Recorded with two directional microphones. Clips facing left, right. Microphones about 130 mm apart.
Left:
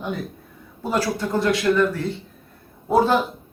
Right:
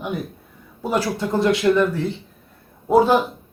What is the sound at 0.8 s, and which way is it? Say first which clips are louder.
A man's voice: right 1 dB; 20° right (ahead or behind).